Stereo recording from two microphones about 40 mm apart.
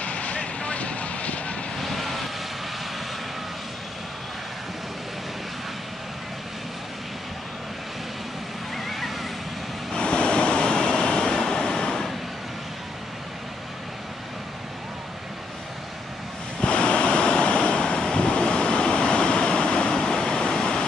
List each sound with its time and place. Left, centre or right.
0.0 s vehicle: left
1.8 s vehicle: centre
8.7 s a sound: centre
9.9 s vehicle: left
16.6 s waves: left